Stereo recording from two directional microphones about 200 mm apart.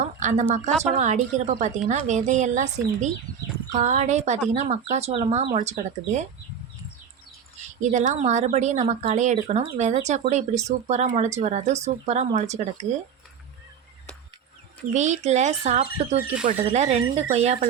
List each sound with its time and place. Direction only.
0.0 s speech: 35° right (ahead or behind)
7.8 s speech: 35° right (ahead or behind)
14.9 s speech: 35° right (ahead or behind)